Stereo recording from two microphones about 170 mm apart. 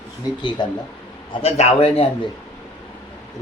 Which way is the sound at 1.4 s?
35° left (ahead or behind).